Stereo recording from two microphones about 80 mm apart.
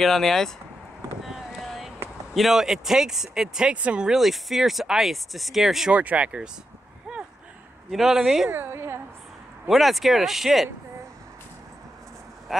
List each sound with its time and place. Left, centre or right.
0.0 s speech: centre
1.2 s boat: centre
2.3 s speech: centre
5.9 s speech: centre
7.1 s a sound: centre
7.9 s speech: centre
8.5 s a sound: right
9.7 s speech: centre
12.5 s a sound: centre